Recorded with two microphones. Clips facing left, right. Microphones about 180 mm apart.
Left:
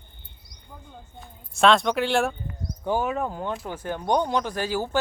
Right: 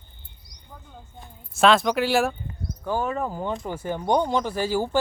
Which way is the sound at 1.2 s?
Centre (ahead or behind).